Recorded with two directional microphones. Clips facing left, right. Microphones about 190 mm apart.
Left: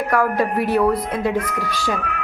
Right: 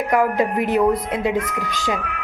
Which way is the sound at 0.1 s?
15° right (ahead or behind).